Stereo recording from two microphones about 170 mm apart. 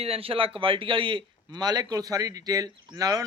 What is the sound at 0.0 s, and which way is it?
A man's voice, 35° right (ahead or behind).